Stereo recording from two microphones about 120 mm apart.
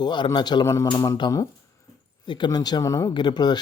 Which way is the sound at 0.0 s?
40° left (ahead or behind).